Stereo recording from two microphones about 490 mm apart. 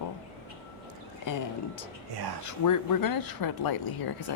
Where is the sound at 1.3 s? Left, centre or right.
Left.